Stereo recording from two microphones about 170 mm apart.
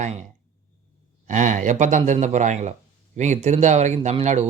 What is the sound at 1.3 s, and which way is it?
A man's voice, 45° right (ahead or behind).